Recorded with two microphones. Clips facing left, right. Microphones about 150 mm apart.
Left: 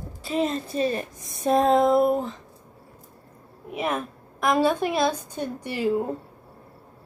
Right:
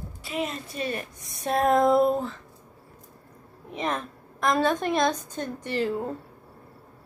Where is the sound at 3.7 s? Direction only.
10° left (ahead or behind).